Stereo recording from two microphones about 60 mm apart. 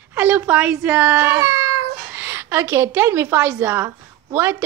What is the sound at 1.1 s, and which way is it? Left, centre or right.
Speech, right.